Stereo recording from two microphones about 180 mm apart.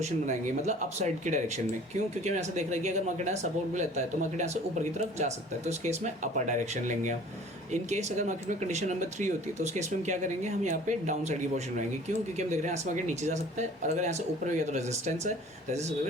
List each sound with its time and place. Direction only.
0.0 s speech: 40° right (ahead or behind)